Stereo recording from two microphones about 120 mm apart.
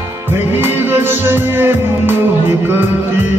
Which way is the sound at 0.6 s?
20° right (ahead or behind).